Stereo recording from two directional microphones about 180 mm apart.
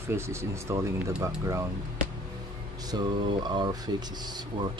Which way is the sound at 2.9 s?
25° right (ahead or behind).